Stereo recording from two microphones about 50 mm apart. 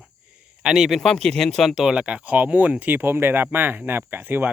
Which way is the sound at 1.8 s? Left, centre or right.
Right.